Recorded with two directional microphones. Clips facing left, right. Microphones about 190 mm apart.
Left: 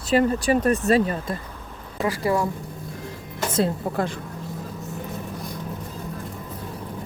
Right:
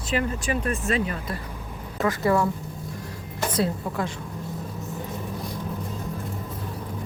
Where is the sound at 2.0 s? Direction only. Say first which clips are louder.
Right 1 dB; 10° left (ahead or behind).